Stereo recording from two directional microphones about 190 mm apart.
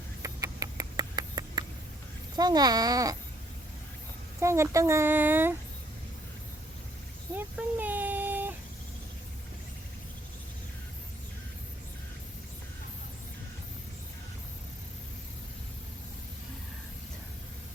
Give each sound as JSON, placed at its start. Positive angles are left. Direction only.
{"t": 0.2, "sound": "rodents", "side_deg": -15}
{"t": 2.3, "sound": "a child's voice", "side_deg": -20}
{"t": 4.4, "sound": "speech", "side_deg": -15}
{"t": 7.3, "sound": "a sound", "side_deg": -10}